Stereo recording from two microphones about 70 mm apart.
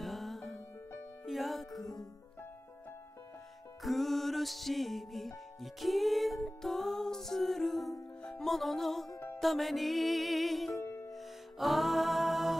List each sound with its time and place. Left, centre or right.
0.0 s music: centre
3.8 s music: centre
10.8 s music: left
11.1 s music: centre